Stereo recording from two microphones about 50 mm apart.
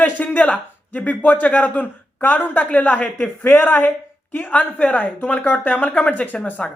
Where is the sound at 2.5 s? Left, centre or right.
Left.